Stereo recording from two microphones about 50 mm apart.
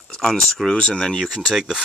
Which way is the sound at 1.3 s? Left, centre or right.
Centre.